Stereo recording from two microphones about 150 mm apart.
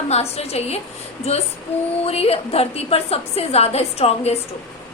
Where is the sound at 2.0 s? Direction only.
40° left (ahead or behind).